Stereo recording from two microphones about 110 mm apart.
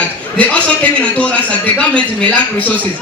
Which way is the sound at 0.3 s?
10° left (ahead or behind).